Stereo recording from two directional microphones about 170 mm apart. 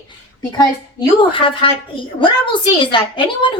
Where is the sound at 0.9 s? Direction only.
30° left (ahead or behind).